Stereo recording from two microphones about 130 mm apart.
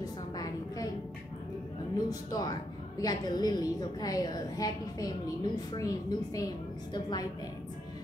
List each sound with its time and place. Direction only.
0.0 s a woman's voice: 30° left (ahead or behind)
2.0 s a woman's voice: 30° left (ahead or behind)